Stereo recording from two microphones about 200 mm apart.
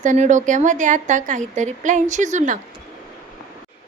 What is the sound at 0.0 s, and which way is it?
A woman's voice, 40° right (ahead or behind).